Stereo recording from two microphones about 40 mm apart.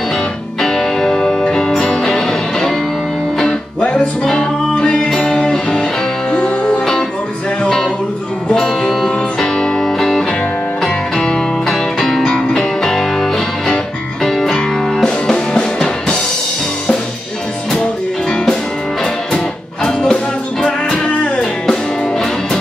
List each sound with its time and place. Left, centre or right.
0.6 s music: centre
6.3 s music: left
8.5 s music: centre
18.3 s music: centre